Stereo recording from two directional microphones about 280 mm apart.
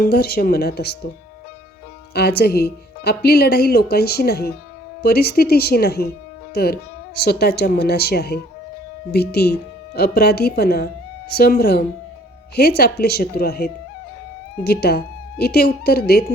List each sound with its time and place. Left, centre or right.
0.0 s speech: left
2.1 s a woman's voice: left